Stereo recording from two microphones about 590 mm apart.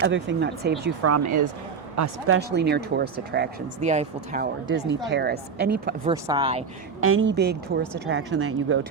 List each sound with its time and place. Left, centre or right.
0.0 s speech: centre
7.0 s speech: centre